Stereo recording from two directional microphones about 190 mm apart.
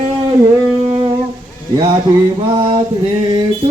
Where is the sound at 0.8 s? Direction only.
30° right (ahead or behind).